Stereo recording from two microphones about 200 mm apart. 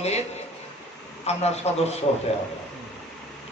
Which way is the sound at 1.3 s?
35° left (ahead or behind).